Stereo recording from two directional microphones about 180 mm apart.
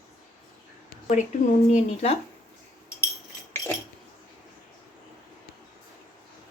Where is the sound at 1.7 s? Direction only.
35° left (ahead or behind).